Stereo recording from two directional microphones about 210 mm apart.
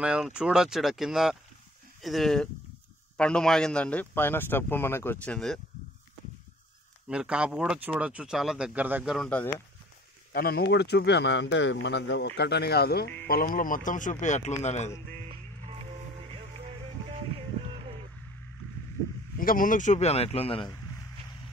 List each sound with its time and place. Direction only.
0.0 s a man's voice: 5° right (ahead or behind)
7.1 s speech: 5° right (ahead or behind)
10.3 s speech: 50° left (ahead or behind); by 14.9 s 30° left (ahead or behind)
15.1 s music: 30° right (ahead or behind)
19.4 s speech: 40° left (ahead or behind); by 20.7 s 25° left (ahead or behind)